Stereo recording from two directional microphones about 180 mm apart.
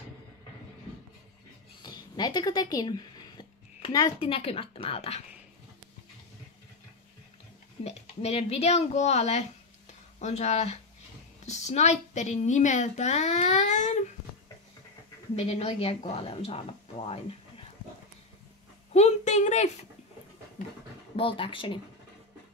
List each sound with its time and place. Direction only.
1.8 s a sound: 25° left (ahead or behind)
4.2 s speech: 30° left (ahead or behind)
7.8 s speech: 35° left (ahead or behind)
15.3 s speech: 35° left (ahead or behind)
18.9 s a sound: 40° left (ahead or behind)
21.2 s speech: 30° left (ahead or behind)